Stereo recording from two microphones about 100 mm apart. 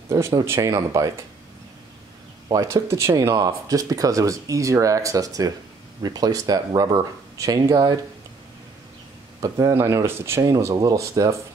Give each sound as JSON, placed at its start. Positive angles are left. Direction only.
{"t": 0.5, "sound": "speech", "side_deg": -30}
{"t": 2.5, "sound": "speech", "side_deg": -30}
{"t": 3.3, "sound": "speech", "side_deg": -40}
{"t": 9.4, "sound": "speech", "side_deg": -35}
{"t": 10.4, "sound": "speech", "side_deg": -40}